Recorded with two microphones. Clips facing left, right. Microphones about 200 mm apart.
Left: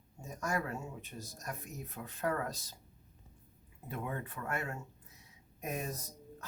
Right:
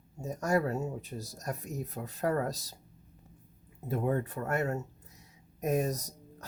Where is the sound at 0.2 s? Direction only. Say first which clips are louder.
Right 8 dB; 40° right (ahead or behind).